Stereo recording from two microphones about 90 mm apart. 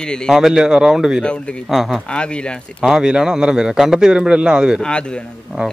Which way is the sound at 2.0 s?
10° left (ahead or behind).